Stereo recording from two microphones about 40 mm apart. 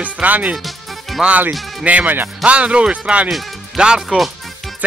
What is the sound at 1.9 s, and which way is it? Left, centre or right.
Speech, right.